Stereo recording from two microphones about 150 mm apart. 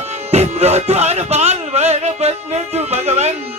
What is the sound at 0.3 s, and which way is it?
Speech, 45° right (ahead or behind).